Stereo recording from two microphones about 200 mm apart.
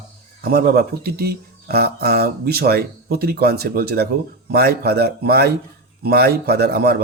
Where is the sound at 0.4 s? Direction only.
50° right (ahead or behind).